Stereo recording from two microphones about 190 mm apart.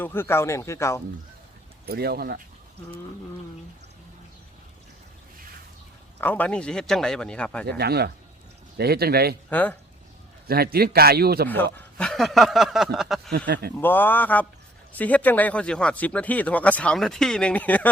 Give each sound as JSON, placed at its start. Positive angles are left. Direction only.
{"t": 0.0, "sound": "speech", "side_deg": 10}
{"t": 1.9, "sound": "a man's voice", "side_deg": -55}
{"t": 6.1, "sound": "speech", "side_deg": 10}
{"t": 7.7, "sound": "a man's voice", "side_deg": -55}
{"t": 9.5, "sound": "speech", "side_deg": 10}
{"t": 10.4, "sound": "a man's voice", "side_deg": -55}
{"t": 11.4, "sound": "speech", "side_deg": 10}
{"t": 13.3, "sound": "a man's voice", "side_deg": -55}
{"t": 13.7, "sound": "speech", "side_deg": 10}